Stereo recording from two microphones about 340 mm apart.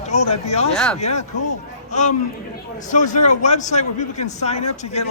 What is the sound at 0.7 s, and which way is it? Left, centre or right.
Speech, centre.